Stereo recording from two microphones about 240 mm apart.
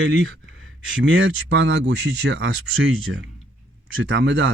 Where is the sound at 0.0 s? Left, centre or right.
Right.